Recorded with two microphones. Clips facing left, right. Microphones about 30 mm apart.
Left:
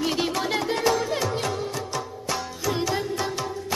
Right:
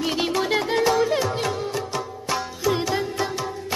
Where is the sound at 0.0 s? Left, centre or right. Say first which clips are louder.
Right 2 dB; centre.